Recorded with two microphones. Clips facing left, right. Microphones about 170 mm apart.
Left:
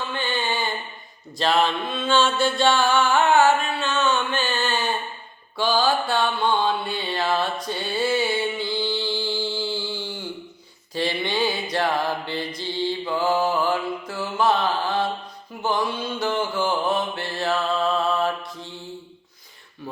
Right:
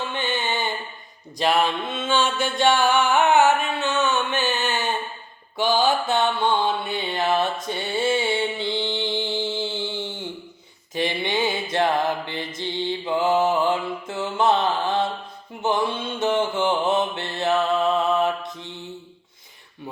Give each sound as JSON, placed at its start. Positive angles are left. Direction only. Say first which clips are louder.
{"t": 0.1, "sound": "mantra", "louder": "even", "side_deg": -20}